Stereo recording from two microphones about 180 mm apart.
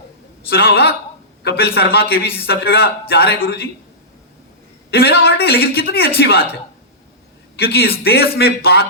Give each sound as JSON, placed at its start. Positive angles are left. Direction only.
{"t": 0.5, "sound": "a man's voice", "side_deg": 60}
{"t": 4.9, "sound": "a man's voice", "side_deg": 60}
{"t": 7.5, "sound": "a man's voice", "side_deg": 60}